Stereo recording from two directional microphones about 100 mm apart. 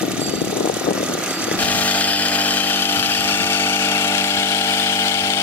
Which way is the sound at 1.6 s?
15° left (ahead or behind).